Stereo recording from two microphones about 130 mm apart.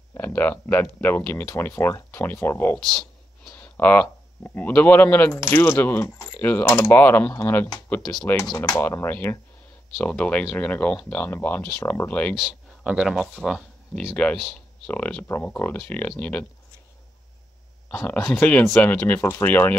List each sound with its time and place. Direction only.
0.1 s speech: 15° left (ahead or behind)
2.9 s a sound: 5° left (ahead or behind)
3.5 s speech: 15° left (ahead or behind)
7.9 s speech: 5° left (ahead or behind)
8.7 s speech: 20° left (ahead or behind)
12.4 s speech: 5° right (ahead or behind)
14.1 s speech: 10° left (ahead or behind)
17.8 s speech: 10° left (ahead or behind)